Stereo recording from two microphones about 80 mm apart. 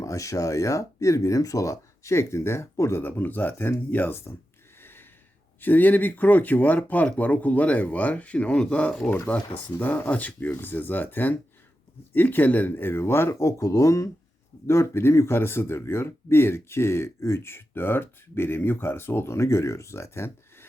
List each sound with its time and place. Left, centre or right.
0.0 s speech: left
3.0 s speech: left
4.8 s a sound: left
5.5 s speech: left